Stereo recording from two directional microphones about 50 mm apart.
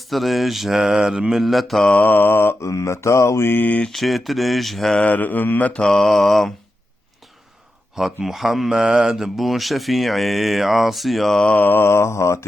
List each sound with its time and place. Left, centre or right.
0.0 s speech: centre
1.4 s speech: centre
2.0 s mantra: left
2.6 s mantra: left
3.6 s mantra: left
3.8 s speech: centre
5.0 s mantra: left
5.9 s speech: centre
7.9 s speech: centre
11.6 s mantra: left